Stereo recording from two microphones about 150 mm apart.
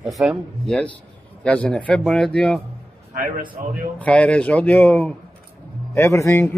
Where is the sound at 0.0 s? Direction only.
Centre (ahead or behind).